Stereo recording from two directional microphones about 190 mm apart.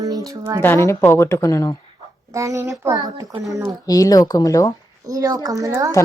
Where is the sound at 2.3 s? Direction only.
15° right (ahead or behind).